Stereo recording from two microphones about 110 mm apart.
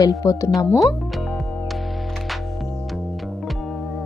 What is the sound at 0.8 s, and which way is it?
Music, centre (ahead or behind).